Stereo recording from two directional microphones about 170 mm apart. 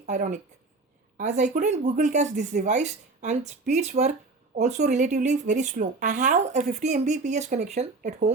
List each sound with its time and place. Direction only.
0.0 s speech: 45° right (ahead or behind)